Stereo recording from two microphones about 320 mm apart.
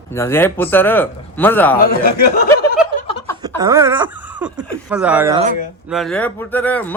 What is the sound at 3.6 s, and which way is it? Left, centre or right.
Wail, centre.